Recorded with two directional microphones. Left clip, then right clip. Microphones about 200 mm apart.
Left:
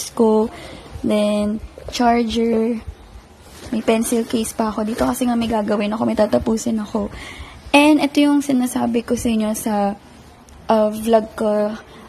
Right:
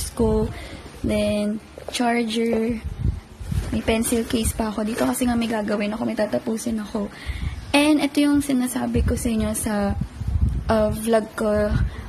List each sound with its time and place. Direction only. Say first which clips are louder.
0.2 s a woman's voice: left 6 dB; 20° left (ahead or behind)